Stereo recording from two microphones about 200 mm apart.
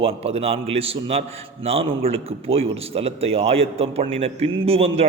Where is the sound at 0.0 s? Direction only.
30° right (ahead or behind).